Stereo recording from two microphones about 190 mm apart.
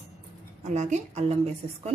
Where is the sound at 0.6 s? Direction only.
35° right (ahead or behind).